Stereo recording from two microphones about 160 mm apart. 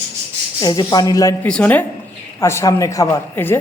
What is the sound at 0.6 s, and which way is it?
Speech, 25° left (ahead or behind).